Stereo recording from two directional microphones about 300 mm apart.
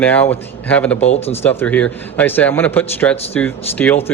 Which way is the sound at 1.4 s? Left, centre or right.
Centre.